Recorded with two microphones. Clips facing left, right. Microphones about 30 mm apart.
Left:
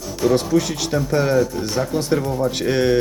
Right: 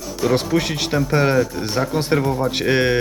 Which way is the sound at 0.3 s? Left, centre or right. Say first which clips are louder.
Left 1 dB; right.